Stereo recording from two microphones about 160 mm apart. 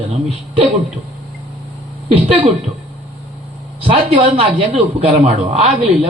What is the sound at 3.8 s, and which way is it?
A man's voice, 35° right (ahead or behind).